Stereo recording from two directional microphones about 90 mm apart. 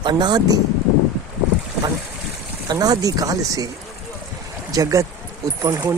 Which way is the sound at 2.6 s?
45° right (ahead or behind).